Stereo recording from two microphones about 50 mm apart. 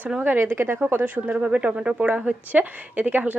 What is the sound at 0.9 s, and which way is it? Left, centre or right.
A woman's voice, right.